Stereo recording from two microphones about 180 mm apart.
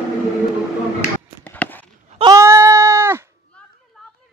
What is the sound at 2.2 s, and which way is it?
Goat, 20° right (ahead or behind).